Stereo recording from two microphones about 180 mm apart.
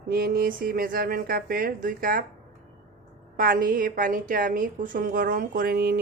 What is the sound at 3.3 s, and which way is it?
Speech, 50° right (ahead or behind).